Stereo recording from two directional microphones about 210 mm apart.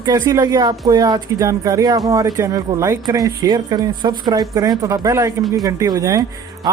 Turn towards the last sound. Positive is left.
turn(degrees=-15)  # may be behind; listen again after turning